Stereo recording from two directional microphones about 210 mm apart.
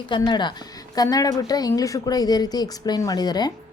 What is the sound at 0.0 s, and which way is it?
A woman's voice, 20° left (ahead or behind).